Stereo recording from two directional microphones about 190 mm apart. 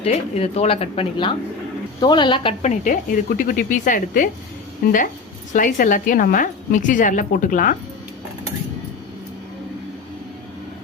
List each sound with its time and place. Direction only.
0.0 s speech: 35° left (ahead or behind)